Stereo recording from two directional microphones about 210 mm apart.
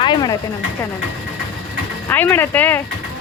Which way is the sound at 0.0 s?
20° left (ahead or behind).